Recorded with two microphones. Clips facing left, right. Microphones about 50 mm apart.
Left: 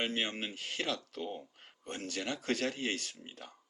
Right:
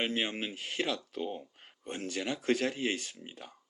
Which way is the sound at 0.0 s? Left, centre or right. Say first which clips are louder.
Right 2 dB; centre.